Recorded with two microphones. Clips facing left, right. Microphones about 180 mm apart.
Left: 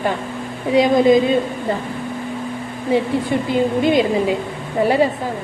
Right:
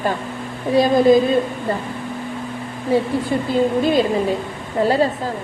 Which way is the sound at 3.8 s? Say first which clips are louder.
Left 1 dB; 15° left (ahead or behind).